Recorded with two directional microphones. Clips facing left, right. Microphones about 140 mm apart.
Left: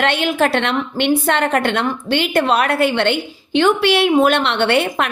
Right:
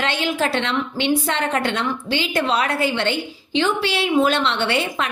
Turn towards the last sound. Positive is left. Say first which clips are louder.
# left 5 dB
turn(degrees=60)  # may be behind; listen again after turning